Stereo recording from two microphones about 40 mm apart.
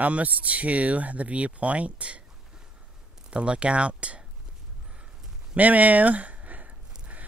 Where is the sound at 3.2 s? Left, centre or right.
Right.